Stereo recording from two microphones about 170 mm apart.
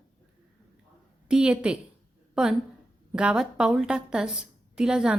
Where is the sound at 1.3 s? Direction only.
5° right (ahead or behind).